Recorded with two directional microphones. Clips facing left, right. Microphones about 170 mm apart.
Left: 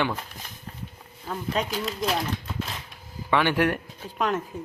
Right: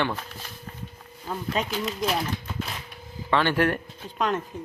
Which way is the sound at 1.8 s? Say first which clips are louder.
Even; centre (ahead or behind).